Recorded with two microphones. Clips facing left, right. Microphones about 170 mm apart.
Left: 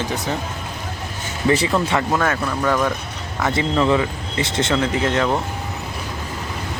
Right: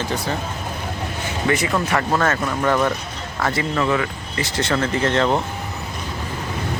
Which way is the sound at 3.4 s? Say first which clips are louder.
Left 2 dB; 20° left (ahead or behind).